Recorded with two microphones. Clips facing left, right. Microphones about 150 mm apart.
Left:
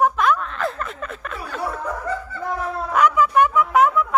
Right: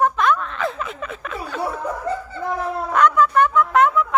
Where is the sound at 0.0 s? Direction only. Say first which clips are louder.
Even; 5° left (ahead or behind).